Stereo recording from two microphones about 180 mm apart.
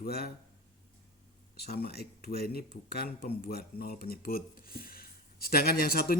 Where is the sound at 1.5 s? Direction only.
60° left (ahead or behind).